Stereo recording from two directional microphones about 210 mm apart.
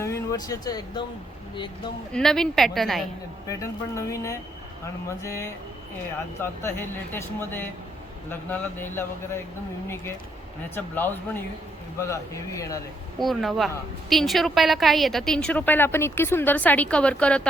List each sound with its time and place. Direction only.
0.0 s speech: 15° left (ahead or behind)
2.1 s a woman's voice: 5° left (ahead or behind)
3.4 s speech: 15° left (ahead or behind)
10.8 s speech: 10° left (ahead or behind)
13.1 s a woman's voice: centre (ahead or behind)